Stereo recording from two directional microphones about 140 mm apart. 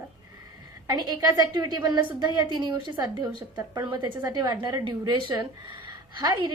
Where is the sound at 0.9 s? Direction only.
30° right (ahead or behind).